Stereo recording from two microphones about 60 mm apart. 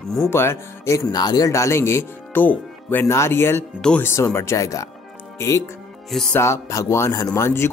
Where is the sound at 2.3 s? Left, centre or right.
Left.